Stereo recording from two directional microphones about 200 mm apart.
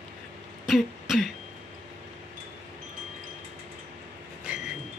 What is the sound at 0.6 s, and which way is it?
Throat clearing, centre (ahead or behind).